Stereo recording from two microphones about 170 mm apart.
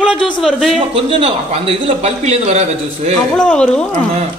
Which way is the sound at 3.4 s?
5° left (ahead or behind).